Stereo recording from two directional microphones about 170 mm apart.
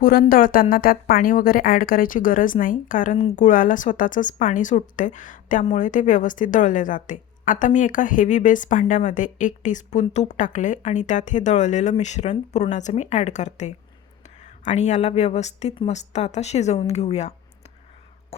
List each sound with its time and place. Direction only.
0.0 s a woman's voice: 55° left (ahead or behind); by 17.3 s 40° left (ahead or behind)